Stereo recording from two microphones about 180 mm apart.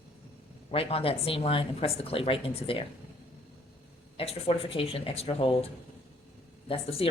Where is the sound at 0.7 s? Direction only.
35° left (ahead or behind).